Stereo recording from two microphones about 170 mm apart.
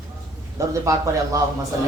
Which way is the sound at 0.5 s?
20° right (ahead or behind).